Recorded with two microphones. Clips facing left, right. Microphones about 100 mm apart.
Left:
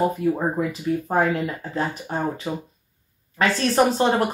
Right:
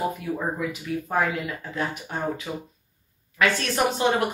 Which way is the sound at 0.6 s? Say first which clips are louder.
Left 5 dB; 40° left (ahead or behind).